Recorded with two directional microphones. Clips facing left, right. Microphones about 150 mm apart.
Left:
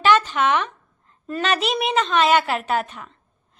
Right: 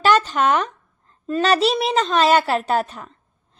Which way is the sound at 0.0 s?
35° right (ahead or behind).